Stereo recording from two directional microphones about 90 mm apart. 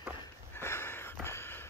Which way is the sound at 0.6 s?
25° left (ahead or behind).